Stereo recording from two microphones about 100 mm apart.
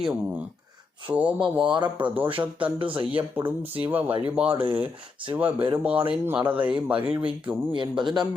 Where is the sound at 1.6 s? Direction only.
50° right (ahead or behind).